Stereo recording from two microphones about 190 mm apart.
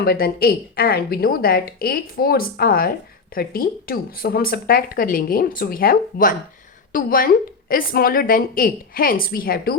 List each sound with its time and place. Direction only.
0.0 s speech: 55° left (ahead or behind)